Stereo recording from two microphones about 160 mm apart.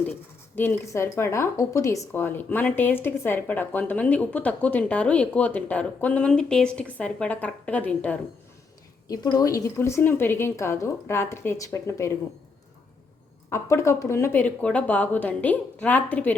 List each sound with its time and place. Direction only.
0.5 s speech: 15° left (ahead or behind)
9.0 s speech: 25° left (ahead or behind)
13.5 s speech: 15° left (ahead or behind)